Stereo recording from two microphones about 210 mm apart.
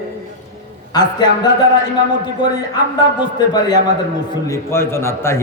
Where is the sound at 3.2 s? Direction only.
20° left (ahead or behind).